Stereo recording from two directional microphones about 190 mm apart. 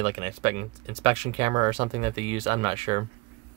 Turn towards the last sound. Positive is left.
turn(degrees=-30)  # may be behind; listen again after turning